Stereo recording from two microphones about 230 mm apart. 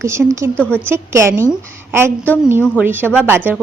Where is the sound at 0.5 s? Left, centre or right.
Centre.